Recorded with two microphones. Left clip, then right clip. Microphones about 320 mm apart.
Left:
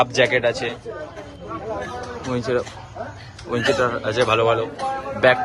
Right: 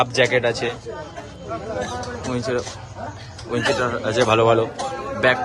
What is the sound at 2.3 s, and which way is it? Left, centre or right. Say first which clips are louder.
A man's voice: left 2 dB; centre.